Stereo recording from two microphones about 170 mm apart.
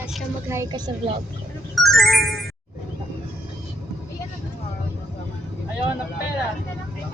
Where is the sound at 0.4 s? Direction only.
15° right (ahead or behind).